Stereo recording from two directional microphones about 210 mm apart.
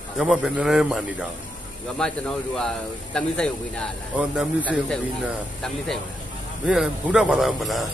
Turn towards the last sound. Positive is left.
turn(degrees=0)  # may be behind; listen again after turning